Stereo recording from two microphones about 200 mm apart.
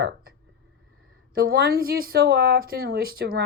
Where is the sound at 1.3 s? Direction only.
50° right (ahead or behind).